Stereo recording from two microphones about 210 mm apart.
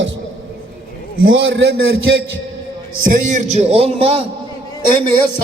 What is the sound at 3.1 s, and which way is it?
A man's voice, 40° right (ahead or behind).